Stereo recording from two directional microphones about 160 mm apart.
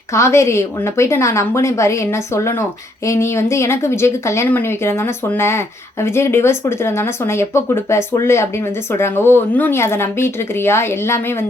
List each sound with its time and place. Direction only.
0.1 s speech: 20° left (ahead or behind)